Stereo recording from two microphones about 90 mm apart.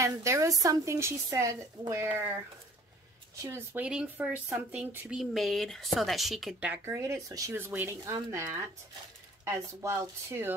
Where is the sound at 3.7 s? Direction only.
10° right (ahead or behind).